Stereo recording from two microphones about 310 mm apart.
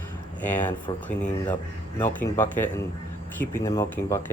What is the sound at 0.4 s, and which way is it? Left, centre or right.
Speech, centre.